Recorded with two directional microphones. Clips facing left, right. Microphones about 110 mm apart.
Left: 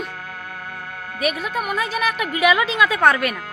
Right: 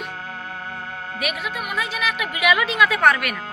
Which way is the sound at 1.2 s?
40° left (ahead or behind).